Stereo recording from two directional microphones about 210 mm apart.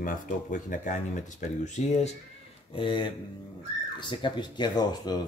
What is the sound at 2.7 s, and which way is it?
Speech, 25° left (ahead or behind).